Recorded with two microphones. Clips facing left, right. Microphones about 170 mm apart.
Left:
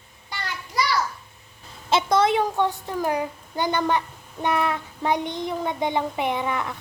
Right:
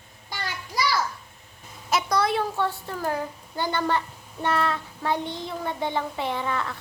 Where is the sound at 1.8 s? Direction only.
25° left (ahead or behind).